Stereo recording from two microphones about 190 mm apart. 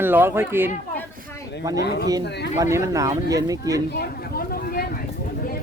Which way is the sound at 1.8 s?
60° left (ahead or behind).